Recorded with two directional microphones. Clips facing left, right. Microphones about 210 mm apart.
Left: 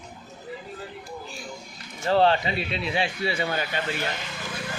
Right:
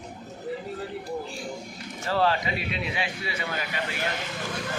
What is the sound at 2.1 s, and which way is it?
A man's voice, 25° left (ahead or behind).